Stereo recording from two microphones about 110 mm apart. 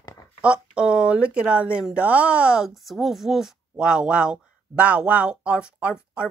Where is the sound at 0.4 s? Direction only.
10° right (ahead or behind).